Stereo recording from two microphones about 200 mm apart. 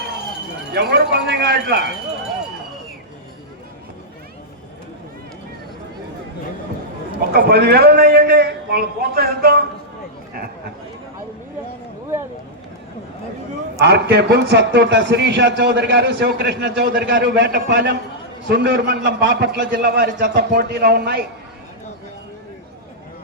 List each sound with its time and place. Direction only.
0.7 s a man's voice: 55° right (ahead or behind)
7.3 s a man's voice: 55° right (ahead or behind)
13.7 s a man's voice: 55° right (ahead or behind)
19.5 s a man's voice: 45° right (ahead or behind)